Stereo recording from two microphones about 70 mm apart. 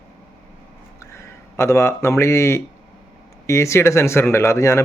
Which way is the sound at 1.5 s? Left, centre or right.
Left.